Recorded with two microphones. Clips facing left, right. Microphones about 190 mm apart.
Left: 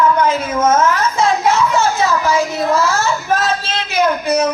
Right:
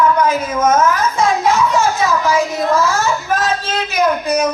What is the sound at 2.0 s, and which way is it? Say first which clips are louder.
Speech: even; 25° left (ahead or behind).